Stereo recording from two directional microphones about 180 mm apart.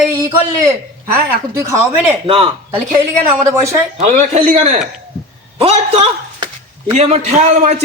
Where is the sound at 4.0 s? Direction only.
40° right (ahead or behind).